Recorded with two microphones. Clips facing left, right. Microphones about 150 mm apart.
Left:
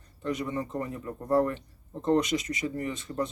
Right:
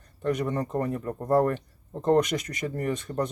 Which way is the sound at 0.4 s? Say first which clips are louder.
Right 4 dB; 45° right (ahead or behind).